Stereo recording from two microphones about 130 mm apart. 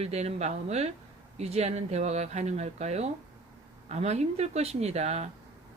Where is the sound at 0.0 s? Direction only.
55° right (ahead or behind).